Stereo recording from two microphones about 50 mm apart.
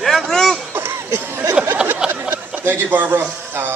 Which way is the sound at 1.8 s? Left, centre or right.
Centre.